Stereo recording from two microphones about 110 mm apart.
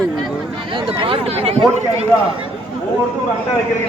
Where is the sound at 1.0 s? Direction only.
60° right (ahead or behind).